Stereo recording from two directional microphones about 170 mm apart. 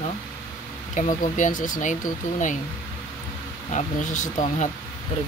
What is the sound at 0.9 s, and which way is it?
Speech, 50° left (ahead or behind).